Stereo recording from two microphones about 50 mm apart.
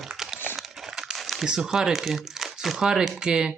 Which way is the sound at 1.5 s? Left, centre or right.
Centre.